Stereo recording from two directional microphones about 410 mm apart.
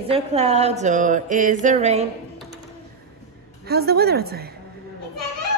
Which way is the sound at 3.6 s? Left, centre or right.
Right.